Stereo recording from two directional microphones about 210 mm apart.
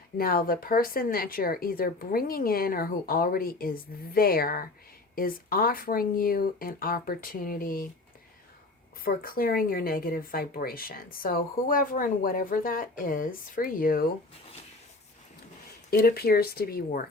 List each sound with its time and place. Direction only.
0.2 s speech: 45° left (ahead or behind)
9.0 s speech: 45° left (ahead or behind)
15.9 s speech: 50° left (ahead or behind)